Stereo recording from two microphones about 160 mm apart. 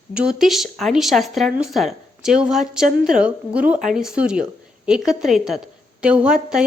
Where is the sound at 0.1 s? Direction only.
5° right (ahead or behind).